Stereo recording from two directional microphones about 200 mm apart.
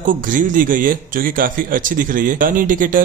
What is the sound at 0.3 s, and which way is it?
Speech, 40° right (ahead or behind).